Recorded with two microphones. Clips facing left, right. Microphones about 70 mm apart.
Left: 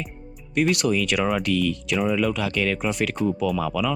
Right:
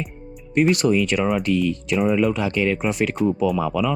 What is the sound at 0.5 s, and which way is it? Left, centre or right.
Speech, right.